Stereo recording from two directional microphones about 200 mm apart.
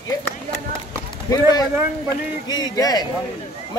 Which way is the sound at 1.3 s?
20° left (ahead or behind).